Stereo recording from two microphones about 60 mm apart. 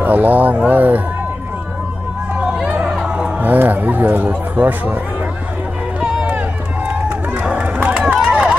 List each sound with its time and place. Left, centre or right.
0.0 s speech: right
2.3 s a sound: centre
3.1 s music: centre
3.4 s speech: right
6.9 s run: right